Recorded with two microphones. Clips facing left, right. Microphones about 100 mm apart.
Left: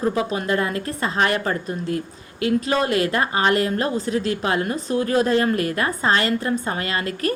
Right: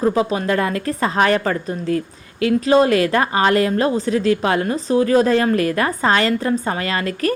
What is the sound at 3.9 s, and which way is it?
Speech, 40° left (ahead or behind).